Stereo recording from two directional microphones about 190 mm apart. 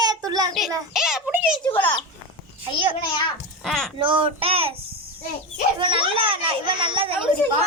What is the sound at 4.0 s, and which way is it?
Speech, 25° right (ahead or behind).